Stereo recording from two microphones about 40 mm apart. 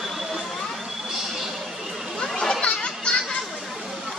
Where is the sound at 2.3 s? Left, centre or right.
Centre.